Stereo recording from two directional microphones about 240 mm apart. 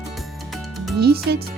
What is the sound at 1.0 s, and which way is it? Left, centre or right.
Speech, right.